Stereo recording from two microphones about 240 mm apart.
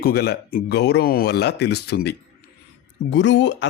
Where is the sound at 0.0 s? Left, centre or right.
Left.